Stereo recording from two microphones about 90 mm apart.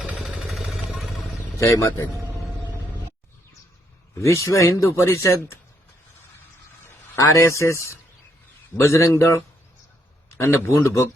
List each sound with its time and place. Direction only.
0.0 s jackhammer: 5° right (ahead or behind)
1.3 s a sound: 35° left (ahead or behind)
4.1 s a man's voice: 35° left (ahead or behind)
7.2 s a man's voice: 35° left (ahead or behind)